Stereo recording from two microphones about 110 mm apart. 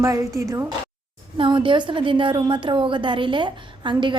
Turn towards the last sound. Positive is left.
turn(degrees=-45)  # may be behind; listen again after turning